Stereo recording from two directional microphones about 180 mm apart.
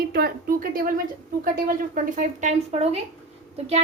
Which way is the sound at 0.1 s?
55° right (ahead or behind).